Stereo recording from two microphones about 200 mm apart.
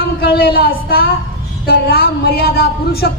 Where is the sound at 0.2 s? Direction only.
50° left (ahead or behind).